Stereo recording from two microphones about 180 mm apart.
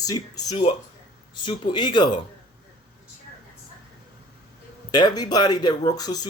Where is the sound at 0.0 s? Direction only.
20° left (ahead or behind).